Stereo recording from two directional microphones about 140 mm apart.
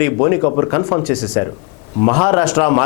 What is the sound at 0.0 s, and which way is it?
A man's voice, 25° left (ahead or behind).